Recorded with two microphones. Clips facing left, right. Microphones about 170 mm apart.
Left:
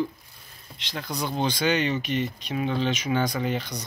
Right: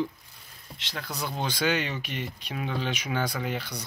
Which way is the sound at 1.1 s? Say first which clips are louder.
Left 5 dB; 5° right (ahead or behind).